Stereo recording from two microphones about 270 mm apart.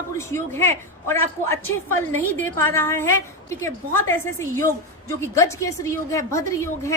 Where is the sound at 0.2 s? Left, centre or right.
Centre.